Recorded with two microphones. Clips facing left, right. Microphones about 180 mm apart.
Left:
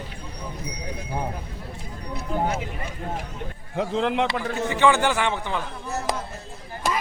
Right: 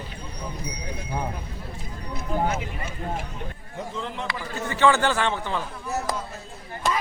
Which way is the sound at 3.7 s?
90° left.